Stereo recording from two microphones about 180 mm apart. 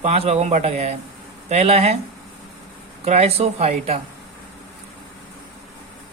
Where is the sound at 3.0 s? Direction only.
35° right (ahead or behind).